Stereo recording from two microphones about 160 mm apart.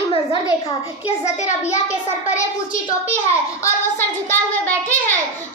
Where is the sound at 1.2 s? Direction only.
45° left (ahead or behind).